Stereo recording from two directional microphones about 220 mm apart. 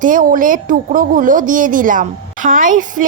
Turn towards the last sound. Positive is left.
turn(degrees=-35)  # may be behind; listen again after turning